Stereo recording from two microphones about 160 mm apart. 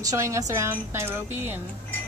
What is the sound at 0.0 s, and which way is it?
A woman's voice, 20° right (ahead or behind).